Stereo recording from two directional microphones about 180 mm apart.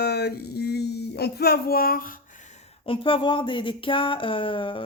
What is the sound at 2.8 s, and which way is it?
Speech, 30° left (ahead or behind).